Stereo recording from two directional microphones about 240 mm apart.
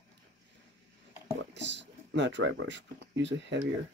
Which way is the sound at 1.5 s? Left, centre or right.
Right.